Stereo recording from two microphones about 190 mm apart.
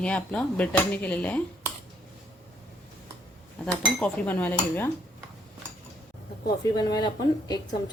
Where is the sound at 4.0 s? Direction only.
10° left (ahead or behind).